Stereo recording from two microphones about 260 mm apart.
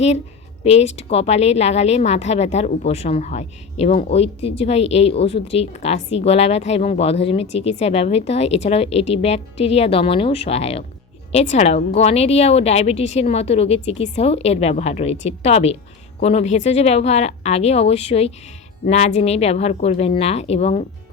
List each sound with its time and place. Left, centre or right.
0.6 s a woman's voice: left